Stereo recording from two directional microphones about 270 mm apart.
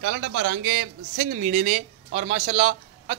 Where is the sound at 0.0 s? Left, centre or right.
Right.